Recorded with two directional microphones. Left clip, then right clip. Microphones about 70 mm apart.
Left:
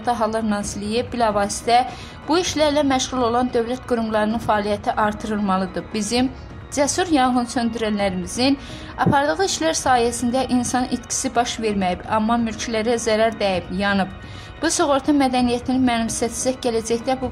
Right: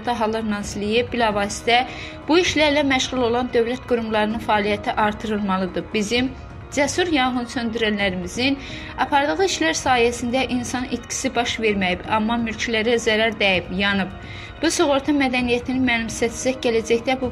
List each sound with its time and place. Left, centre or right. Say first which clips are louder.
0.0 s a woman's voice: left 1 dB; centre
2.6 s a woman's voice: even; centre
7.0 s a woman's voice: left 2 dB; left
8.9 s a woman's voice: left 1 dB; centre
9.2 s a woman's voice: even; left
11.8 s a woman's voice: even; centre
12.4 s a woman's voice: right 1 dB; left; by 14.0 s centre
14.6 s a woman's voice: even; left